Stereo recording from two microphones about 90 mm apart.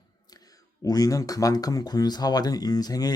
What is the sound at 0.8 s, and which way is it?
Speech, 40° left (ahead or behind).